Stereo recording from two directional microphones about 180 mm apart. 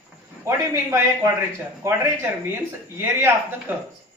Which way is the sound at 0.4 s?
15° right (ahead or behind).